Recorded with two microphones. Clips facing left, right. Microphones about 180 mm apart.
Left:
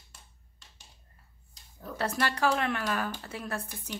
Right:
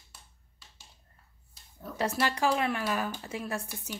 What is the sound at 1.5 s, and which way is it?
Speech, 10° right (ahead or behind).